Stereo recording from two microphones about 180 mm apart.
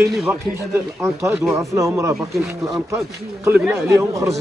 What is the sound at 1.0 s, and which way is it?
Speech, 15° right (ahead or behind).